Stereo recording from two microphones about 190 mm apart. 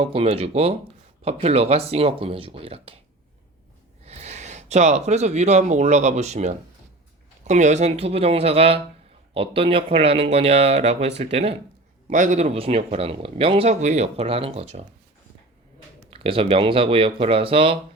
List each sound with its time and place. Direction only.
0.0 s speech: 30° right (ahead or behind)
4.0 s speech: 35° right (ahead or behind)
16.0 s speech: 30° right (ahead or behind)